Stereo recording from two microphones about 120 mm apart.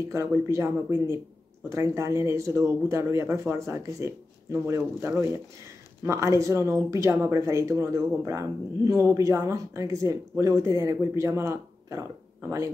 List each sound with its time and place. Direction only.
0.1 s speech: 25° right (ahead or behind)